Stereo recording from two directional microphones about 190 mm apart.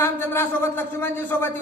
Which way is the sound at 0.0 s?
10° left (ahead or behind).